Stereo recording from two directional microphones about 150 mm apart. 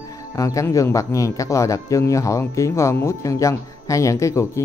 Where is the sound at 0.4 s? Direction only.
20° left (ahead or behind).